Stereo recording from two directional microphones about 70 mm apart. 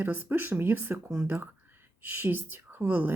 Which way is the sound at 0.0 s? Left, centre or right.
Right.